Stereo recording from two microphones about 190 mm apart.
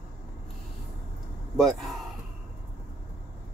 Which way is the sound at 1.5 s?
Centre (ahead or behind).